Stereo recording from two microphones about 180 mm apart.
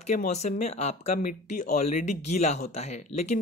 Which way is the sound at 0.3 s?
40° left (ahead or behind).